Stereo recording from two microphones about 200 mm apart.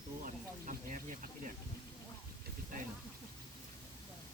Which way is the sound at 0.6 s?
45° right (ahead or behind).